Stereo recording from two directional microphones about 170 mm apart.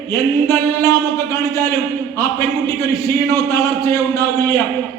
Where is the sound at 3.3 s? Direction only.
20° left (ahead or behind).